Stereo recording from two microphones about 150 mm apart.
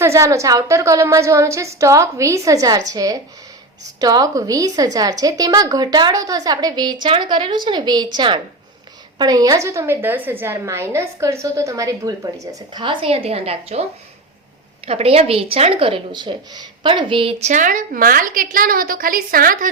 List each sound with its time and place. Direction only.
0.0 s a woman's voice: 20° right (ahead or behind); by 13.8 s 40° right (ahead or behind)
14.8 s speech: 40° right (ahead or behind)
17.5 s a woman's voice: 60° right (ahead or behind)